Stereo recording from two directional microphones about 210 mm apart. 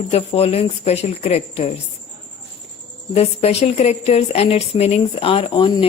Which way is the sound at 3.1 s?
30° left (ahead or behind).